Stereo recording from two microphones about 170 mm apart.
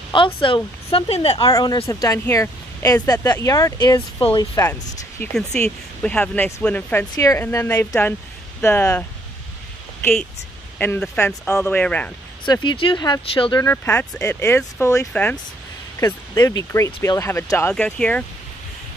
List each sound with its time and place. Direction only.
0.1 s speech: 30° left (ahead or behind)
1.5 s speech: 25° left (ahead or behind)
5.2 s speech: 5° left (ahead or behind)
10.8 s speech: 10° left (ahead or behind)
12.6 s speech: 25° left (ahead or behind)
13.6 s speech: 15° left (ahead or behind)